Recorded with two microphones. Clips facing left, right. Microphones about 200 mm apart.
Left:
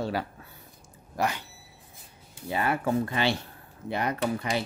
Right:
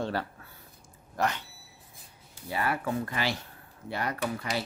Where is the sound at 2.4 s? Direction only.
25° left (ahead or behind).